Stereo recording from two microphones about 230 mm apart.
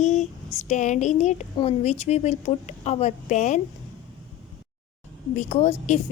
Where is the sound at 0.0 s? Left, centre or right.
Left.